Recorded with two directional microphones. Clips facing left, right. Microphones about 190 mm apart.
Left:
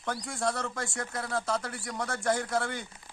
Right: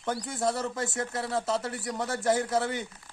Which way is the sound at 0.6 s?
20° right (ahead or behind).